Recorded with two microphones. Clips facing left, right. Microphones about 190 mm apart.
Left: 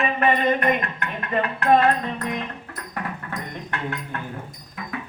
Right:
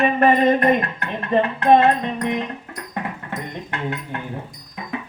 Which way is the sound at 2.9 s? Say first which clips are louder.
Right 2 dB; 20° right (ahead or behind).